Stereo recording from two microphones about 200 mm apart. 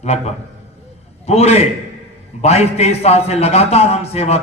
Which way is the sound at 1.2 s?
30° left (ahead or behind).